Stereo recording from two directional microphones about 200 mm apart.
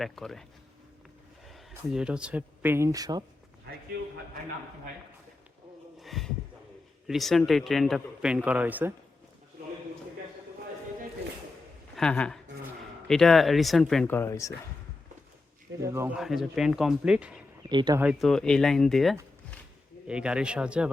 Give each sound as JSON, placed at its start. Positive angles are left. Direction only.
{"t": 0.0, "sound": "a man's voice", "side_deg": 0}
{"t": 1.5, "sound": "speech", "side_deg": 0}
{"t": 3.9, "sound": "a man's voice", "side_deg": -55}
{"t": 6.0, "sound": "a sound", "side_deg": 0}
{"t": 7.1, "sound": "a man's voice", "side_deg": 0}
{"t": 11.9, "sound": "a man's voice", "side_deg": 5}
{"t": 15.8, "sound": "speech", "side_deg": -15}
{"t": 16.1, "sound": "a man's voice", "side_deg": 0}
{"t": 17.7, "sound": "speech", "side_deg": -20}
{"t": 18.0, "sound": "a man's voice", "side_deg": -5}